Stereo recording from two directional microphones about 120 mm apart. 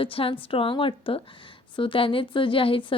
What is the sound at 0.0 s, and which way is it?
A woman's voice, 50° left (ahead or behind).